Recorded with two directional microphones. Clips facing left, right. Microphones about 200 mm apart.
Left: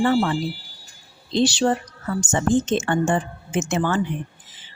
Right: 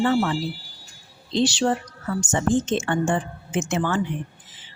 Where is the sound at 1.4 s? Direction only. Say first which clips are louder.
Left 2 dB; 40° left (ahead or behind).